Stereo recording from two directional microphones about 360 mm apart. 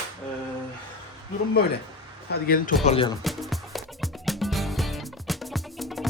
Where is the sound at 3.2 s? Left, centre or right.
Centre.